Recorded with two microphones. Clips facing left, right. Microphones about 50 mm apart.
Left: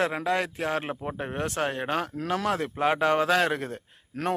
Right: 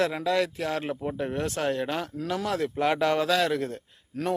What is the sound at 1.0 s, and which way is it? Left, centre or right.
Speech, left.